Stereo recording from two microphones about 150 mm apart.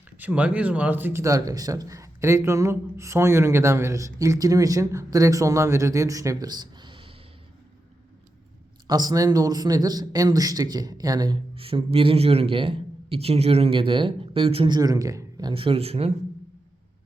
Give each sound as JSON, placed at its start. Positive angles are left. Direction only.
{"t": 0.2, "sound": "a man's voice", "side_deg": -10}
{"t": 8.9, "sound": "a man's voice", "side_deg": -25}
{"t": 11.5, "sound": "a man's voice", "side_deg": -40}
{"t": 14.8, "sound": "a man's voice", "side_deg": -25}